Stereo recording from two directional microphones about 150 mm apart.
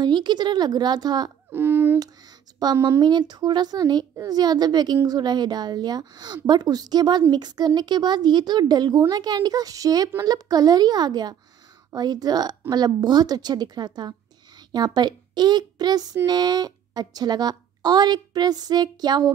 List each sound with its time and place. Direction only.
0.0 s a woman's voice: 30° right (ahead or behind)
1.5 s a sound: 15° right (ahead or behind)
2.2 s a woman's voice: 25° right (ahead or behind)